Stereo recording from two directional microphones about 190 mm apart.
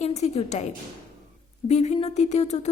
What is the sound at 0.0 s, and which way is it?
A woman's voice, 35° left (ahead or behind).